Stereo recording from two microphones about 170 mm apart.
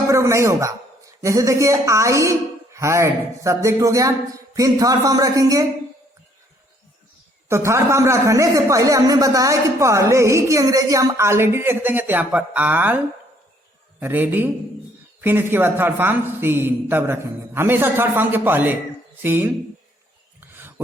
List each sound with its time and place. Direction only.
0.1 s a woman's voice: 15° right (ahead or behind)
7.4 s speech: 15° right (ahead or behind)
14.0 s speech: 10° right (ahead or behind)
20.4 s a sound: 10° right (ahead or behind)